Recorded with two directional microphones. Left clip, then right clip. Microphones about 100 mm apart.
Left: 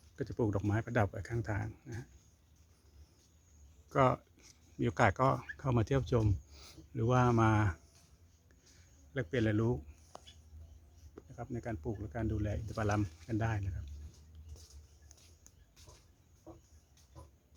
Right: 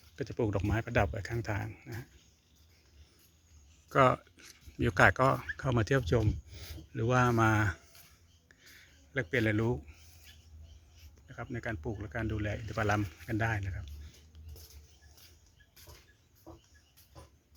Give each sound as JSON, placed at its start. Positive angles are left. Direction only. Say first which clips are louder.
{"t": 0.2, "sound": "speech", "louder": "right 2 dB", "side_deg": 15}
{"t": 0.8, "sound": "speech", "louder": "right 5 dB", "side_deg": 5}
{"t": 3.8, "sound": "speech", "louder": "right 4 dB", "side_deg": -10}
{"t": 6.5, "sound": "speech", "louder": "right 4 dB", "side_deg": 10}
{"t": 9.1, "sound": "a man's voice", "louder": "right 3 dB", "side_deg": -5}
{"t": 11.3, "sound": "speech", "louder": "right 3 dB", "side_deg": -5}